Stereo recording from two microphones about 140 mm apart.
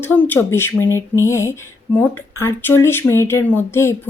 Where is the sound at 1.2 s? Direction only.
20° left (ahead or behind).